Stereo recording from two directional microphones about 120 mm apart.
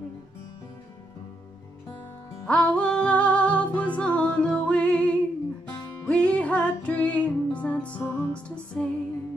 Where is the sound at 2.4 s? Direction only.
10° left (ahead or behind).